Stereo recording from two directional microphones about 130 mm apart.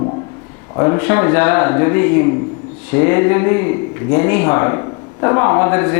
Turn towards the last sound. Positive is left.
turn(degrees=20)  # may be behind; listen again after turning